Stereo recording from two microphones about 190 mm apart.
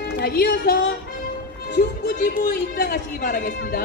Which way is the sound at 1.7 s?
50° left (ahead or behind).